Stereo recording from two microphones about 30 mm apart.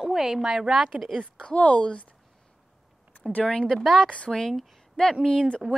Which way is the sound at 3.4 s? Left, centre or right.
Left.